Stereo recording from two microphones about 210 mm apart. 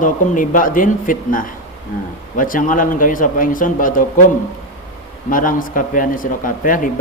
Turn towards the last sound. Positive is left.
turn(degrees=40)  # may be behind; listen again after turning